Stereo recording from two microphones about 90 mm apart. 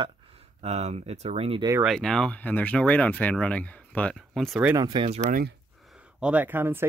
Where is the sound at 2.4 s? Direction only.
20° left (ahead or behind).